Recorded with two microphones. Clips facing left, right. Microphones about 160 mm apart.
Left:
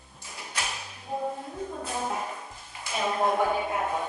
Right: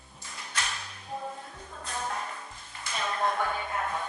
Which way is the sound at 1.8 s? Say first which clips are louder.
Left 1 dB; 10° left (ahead or behind).